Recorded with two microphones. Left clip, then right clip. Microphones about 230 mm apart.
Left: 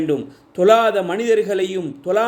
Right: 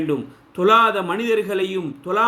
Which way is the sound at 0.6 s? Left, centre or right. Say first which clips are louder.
Left 2 dB; centre.